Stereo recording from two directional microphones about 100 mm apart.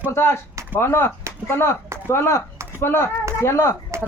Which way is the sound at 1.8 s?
25° right (ahead or behind).